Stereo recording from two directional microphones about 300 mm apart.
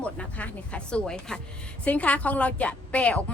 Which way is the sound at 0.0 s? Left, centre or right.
Centre.